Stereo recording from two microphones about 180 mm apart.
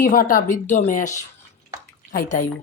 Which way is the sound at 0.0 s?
50° left (ahead or behind).